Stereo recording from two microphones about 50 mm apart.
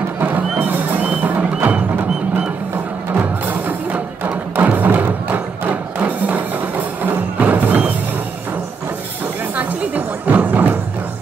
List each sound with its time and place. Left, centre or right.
0.2 s music: right
9.6 s music: right